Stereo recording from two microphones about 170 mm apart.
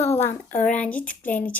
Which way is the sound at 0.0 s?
15° left (ahead or behind).